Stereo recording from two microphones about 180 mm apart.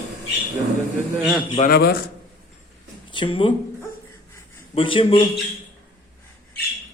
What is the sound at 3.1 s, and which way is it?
Speech, 30° left (ahead or behind).